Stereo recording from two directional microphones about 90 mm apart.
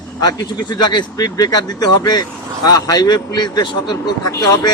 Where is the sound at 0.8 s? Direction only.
55° left (ahead or behind).